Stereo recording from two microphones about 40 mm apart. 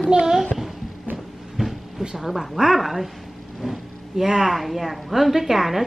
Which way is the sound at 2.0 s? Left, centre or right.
Centre.